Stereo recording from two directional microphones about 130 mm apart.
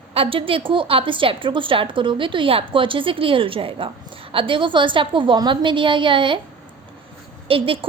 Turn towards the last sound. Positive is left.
turn(degrees=-45)  # may be behind; listen again after turning